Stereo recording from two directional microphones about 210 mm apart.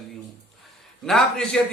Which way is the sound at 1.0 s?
Centre (ahead or behind).